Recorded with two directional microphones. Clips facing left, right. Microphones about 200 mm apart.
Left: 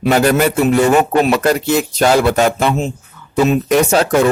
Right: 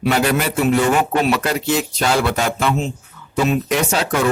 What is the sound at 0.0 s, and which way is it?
Speech, 45° left (ahead or behind).